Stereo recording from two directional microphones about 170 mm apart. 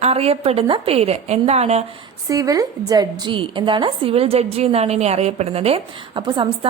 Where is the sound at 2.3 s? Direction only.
20° right (ahead or behind).